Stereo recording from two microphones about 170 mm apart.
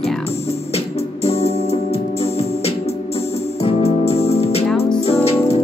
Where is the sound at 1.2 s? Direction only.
35° left (ahead or behind).